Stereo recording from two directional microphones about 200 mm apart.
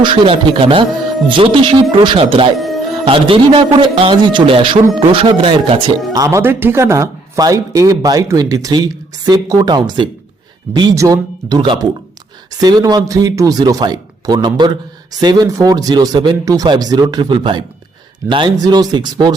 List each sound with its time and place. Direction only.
0.0 s speech: 25° right (ahead or behind)
2.6 s music: centre (ahead or behind)
3.0 s speech: 25° right (ahead or behind)
6.1 s speech: 15° right (ahead or behind)